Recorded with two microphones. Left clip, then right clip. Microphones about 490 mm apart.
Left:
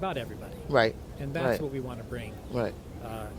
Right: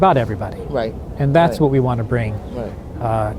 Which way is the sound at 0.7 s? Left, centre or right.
Left.